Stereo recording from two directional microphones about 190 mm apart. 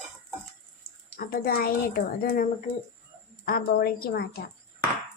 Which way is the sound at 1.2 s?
50° left (ahead or behind).